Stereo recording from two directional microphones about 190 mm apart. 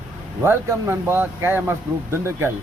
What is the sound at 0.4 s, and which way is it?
Speech, 10° right (ahead or behind).